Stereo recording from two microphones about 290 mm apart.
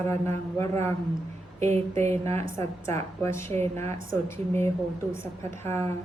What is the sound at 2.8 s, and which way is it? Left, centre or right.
Speech, centre.